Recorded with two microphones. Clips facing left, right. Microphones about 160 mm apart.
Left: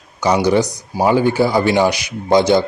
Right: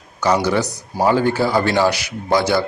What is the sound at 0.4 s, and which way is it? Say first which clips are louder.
A man's voice: left 4 dB; 15° left (ahead or behind).